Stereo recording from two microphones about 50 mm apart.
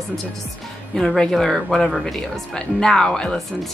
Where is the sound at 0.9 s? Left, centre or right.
Centre.